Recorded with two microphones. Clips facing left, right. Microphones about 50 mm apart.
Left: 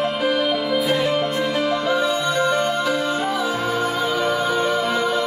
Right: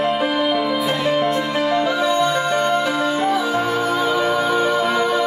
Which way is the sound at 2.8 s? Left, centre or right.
Centre.